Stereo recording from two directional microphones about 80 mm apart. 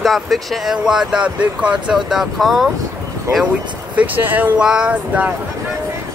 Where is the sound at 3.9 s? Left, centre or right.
Right.